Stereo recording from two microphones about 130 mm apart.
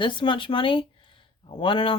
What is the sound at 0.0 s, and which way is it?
Speech, 40° left (ahead or behind).